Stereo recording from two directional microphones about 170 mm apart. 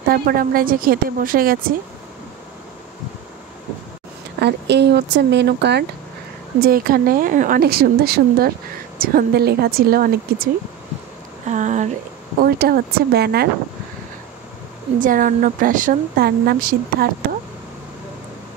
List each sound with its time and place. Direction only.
0.1 s speech: 60° right (ahead or behind)
4.4 s speech: 80° right
6.6 s speech: 60° right (ahead or behind)
11.4 s a sound: 45° right (ahead or behind)
12.4 s speech: 65° right (ahead or behind)
15.0 s speech: 50° right (ahead or behind)